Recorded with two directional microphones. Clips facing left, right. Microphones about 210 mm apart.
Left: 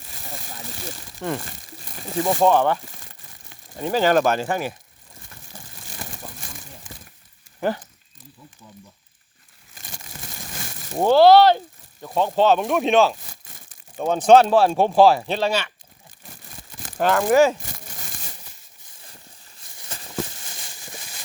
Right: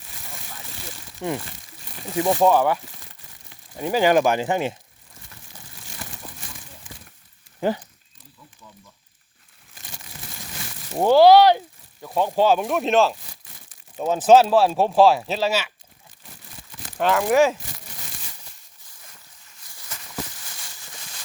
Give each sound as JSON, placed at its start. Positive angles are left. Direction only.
{"t": 0.1, "sound": "a sound", "side_deg": 35}
{"t": 1.5, "sound": "crumpling", "side_deg": 45}
{"t": 2.1, "sound": "speech", "side_deg": -15}
{"t": 3.8, "sound": "speech", "side_deg": -10}
{"t": 5.5, "sound": "crumpling", "side_deg": 45}
{"t": 10.9, "sound": "speech", "side_deg": -15}
{"t": 13.5, "sound": "crumpling", "side_deg": 50}
{"t": 14.0, "sound": "speech", "side_deg": -5}
{"t": 16.3, "sound": "a sound", "side_deg": 45}
{"t": 17.0, "sound": "speech", "side_deg": 0}
{"t": 17.7, "sound": "a sound", "side_deg": 50}
{"t": 19.0, "sound": "a sound", "side_deg": 30}